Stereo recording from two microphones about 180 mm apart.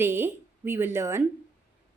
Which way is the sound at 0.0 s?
15° right (ahead or behind).